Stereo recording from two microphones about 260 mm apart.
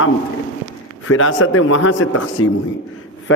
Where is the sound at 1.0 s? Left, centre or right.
Left.